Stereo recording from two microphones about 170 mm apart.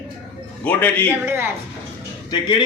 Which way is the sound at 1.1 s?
15° right (ahead or behind).